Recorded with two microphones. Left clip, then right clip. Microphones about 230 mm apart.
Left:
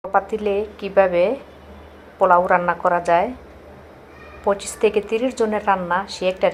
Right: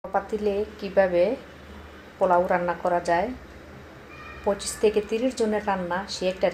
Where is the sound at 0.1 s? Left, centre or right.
Centre.